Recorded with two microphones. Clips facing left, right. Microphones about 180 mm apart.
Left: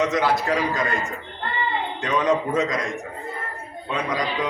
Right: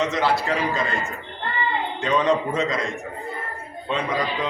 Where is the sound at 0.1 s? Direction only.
20° left (ahead or behind).